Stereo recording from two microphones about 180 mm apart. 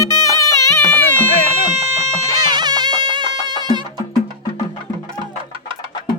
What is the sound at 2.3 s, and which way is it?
Music, 25° right (ahead or behind).